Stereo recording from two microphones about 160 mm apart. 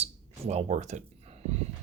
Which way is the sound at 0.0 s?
40° right (ahead or behind).